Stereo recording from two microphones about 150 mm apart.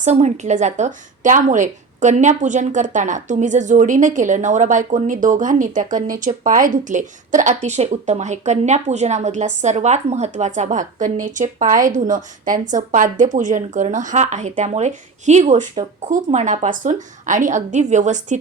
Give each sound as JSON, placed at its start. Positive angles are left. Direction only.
{"t": 0.0, "sound": "speech", "side_deg": -50}